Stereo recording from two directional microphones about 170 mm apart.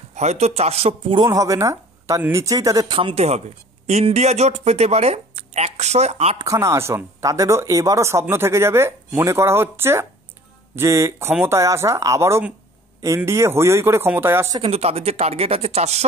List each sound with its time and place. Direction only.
0.1 s speech: 40° right (ahead or behind)
1.3 s speech: 20° right (ahead or behind); by 6.4 s 40° right (ahead or behind)
6.4 s speech: 20° right (ahead or behind)
14.6 s speech: 35° right (ahead or behind)